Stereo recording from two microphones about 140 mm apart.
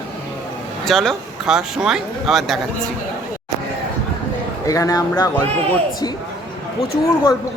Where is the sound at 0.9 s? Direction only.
Centre (ahead or behind).